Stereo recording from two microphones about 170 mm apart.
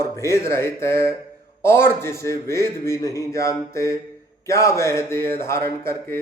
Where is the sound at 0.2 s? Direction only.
15° left (ahead or behind).